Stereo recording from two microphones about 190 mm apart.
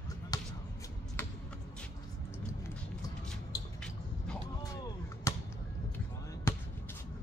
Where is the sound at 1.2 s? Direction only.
10° left (ahead or behind).